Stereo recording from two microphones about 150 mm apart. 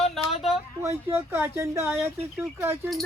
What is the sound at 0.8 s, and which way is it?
Speech, 15° right (ahead or behind).